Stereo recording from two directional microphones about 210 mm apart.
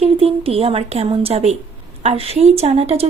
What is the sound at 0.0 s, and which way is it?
A woman's voice, 30° right (ahead or behind).